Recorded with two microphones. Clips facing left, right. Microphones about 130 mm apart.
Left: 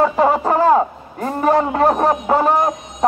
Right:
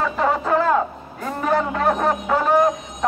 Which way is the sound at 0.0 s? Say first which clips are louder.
Left 6 dB; 35° left (ahead or behind).